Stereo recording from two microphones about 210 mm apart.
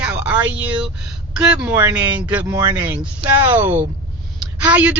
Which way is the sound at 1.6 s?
10° right (ahead or behind).